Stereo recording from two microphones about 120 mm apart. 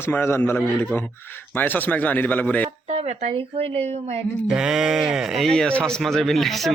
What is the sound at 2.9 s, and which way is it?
Speech, 65° right (ahead or behind).